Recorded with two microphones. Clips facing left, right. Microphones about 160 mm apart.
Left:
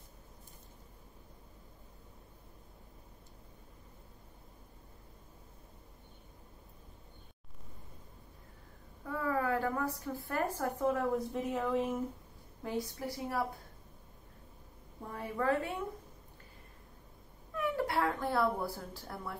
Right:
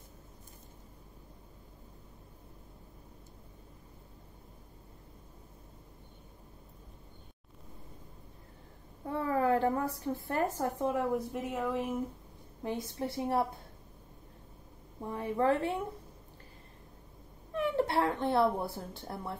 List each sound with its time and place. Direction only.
9.0 s a woman's voice: 30° right (ahead or behind); by 12.0 s 10° right (ahead or behind)
12.6 s a woman's voice: 25° right (ahead or behind)
15.3 s a woman's voice: 25° right (ahead or behind)
17.6 s speech: 25° right (ahead or behind)